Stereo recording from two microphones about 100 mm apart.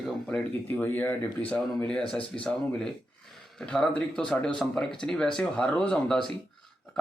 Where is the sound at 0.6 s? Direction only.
20° left (ahead or behind).